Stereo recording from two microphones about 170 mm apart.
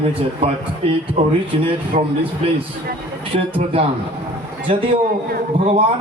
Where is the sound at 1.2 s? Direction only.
40° right (ahead or behind).